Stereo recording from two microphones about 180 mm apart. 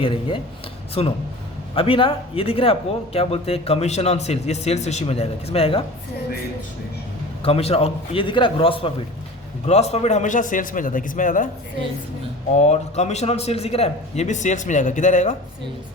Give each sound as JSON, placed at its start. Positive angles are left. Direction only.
{"t": 0.0, "sound": "speech", "side_deg": 30}
{"t": 7.4, "sound": "a man's voice", "side_deg": 35}
{"t": 12.6, "sound": "speech", "side_deg": 40}